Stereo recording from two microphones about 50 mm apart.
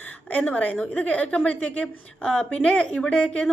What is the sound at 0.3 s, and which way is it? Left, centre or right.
A woman's voice, left.